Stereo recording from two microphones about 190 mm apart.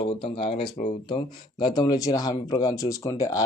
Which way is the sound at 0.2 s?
30° left (ahead or behind).